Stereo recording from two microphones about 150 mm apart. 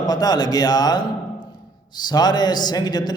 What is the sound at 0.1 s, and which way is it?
A man's voice, 25° left (ahead or behind).